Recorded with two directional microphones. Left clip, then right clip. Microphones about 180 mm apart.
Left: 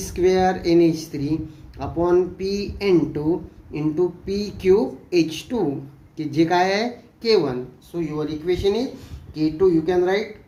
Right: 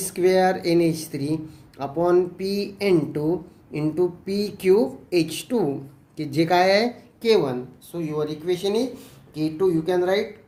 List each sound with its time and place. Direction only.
0.0 s speech: 35° right (ahead or behind)